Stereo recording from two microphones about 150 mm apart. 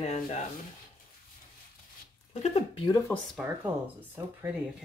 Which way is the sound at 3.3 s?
10° right (ahead or behind).